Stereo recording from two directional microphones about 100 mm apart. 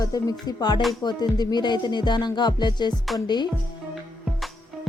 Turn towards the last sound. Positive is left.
turn(degrees=45)  # may be behind; listen again after turning